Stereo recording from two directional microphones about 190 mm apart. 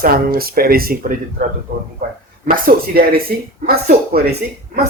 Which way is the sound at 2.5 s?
50° right (ahead or behind).